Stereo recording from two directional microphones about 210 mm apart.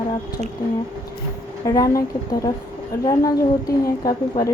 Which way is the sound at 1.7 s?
15° left (ahead or behind).